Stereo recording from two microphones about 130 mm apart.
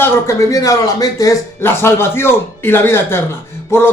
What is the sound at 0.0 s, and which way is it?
A man's voice, 20° left (ahead or behind).